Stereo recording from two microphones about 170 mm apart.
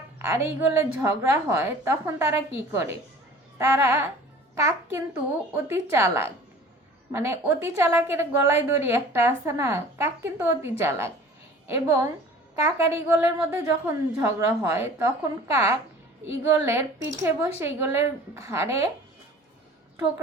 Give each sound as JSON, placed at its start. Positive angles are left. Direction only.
{"t": 0.2, "sound": "a woman's voice", "side_deg": -15}